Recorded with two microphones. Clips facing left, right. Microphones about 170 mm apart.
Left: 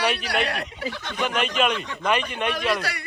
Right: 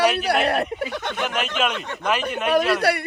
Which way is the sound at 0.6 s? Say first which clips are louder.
Right 6 dB; 55° right (ahead or behind).